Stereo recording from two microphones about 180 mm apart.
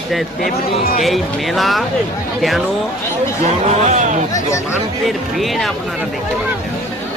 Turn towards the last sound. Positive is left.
turn(degrees=0)  # may be behind; listen again after turning